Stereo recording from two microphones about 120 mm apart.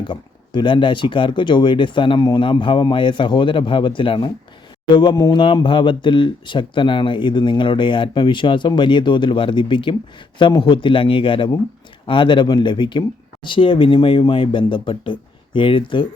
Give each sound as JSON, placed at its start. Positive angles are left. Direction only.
{"t": 0.1, "sound": "speech", "side_deg": 40}